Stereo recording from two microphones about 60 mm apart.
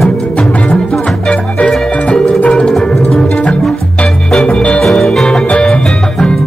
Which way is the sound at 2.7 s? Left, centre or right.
Centre.